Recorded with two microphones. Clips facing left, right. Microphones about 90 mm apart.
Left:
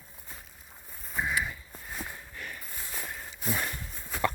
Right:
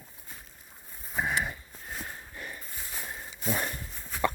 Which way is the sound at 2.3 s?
25° right (ahead or behind).